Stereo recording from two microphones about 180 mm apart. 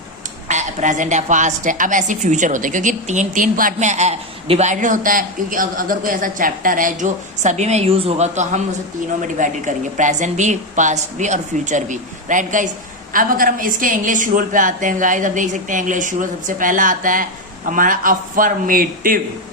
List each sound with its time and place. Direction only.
0.4 s a woman's voice: 40° right (ahead or behind)